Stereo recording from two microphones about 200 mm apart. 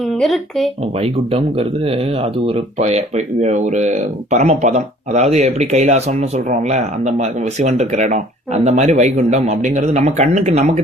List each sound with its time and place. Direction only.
0.2 s speech: centre (ahead or behind)
1.0 s speech: 30° right (ahead or behind)
2.7 s speech: 35° right (ahead or behind)